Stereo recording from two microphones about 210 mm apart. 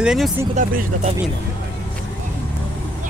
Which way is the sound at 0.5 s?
35° right (ahead or behind).